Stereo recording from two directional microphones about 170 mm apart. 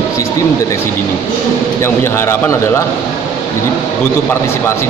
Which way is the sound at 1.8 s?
15° left (ahead or behind).